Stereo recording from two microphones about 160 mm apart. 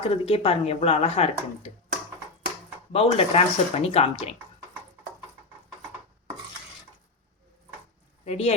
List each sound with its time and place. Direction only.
0.0 s speech: 35° left (ahead or behind)
2.9 s speech: 40° left (ahead or behind)
8.2 s speech: 40° left (ahead or behind)